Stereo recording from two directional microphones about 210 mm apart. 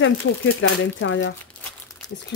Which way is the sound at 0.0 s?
65° left (ahead or behind).